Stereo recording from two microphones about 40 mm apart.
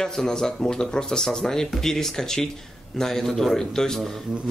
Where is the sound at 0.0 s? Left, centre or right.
Centre.